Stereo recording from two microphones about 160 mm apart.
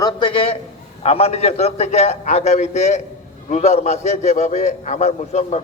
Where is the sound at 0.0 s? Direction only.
30° left (ahead or behind).